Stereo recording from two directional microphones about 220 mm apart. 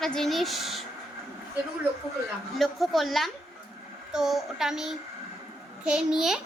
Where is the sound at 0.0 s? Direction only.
Centre (ahead or behind).